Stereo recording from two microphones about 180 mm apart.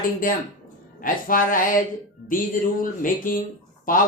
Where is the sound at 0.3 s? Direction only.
50° left (ahead or behind).